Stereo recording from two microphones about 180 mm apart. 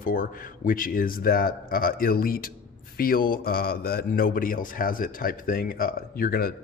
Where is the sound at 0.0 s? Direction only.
50° left (ahead or behind).